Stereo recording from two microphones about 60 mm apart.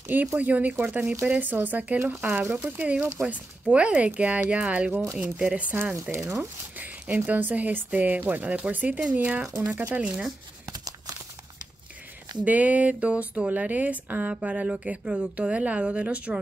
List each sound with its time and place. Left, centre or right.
0.1 s speech: right
7.2 s speech: right
9.5 s speech: right
9.8 s speech: right
10.7 s crumpling: right
12.4 s speech: right